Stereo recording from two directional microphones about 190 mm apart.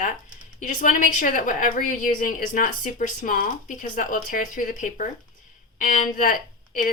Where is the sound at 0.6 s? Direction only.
45° left (ahead or behind).